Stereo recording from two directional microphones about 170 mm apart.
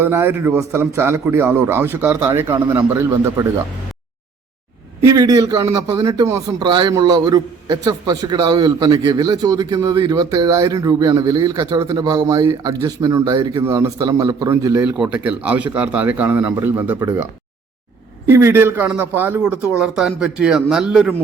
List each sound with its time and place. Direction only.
0.0 s a man's voice: 10° right (ahead or behind)
5.0 s a man's voice: 20° right (ahead or behind)
14.8 s a man's voice: 5° right (ahead or behind)
18.3 s a man's voice: 15° right (ahead or behind)